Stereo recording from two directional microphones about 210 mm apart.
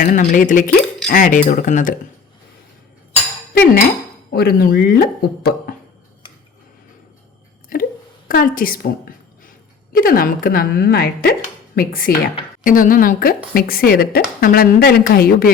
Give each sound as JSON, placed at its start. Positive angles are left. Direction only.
{"t": 0.0, "sound": "speech", "side_deg": 40}
{"t": 3.5, "sound": "a woman's voice", "side_deg": 45}
{"t": 7.7, "sound": "a woman's voice", "side_deg": 40}